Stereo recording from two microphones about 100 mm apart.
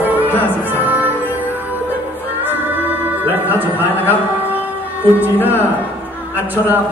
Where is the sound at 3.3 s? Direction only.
20° right (ahead or behind).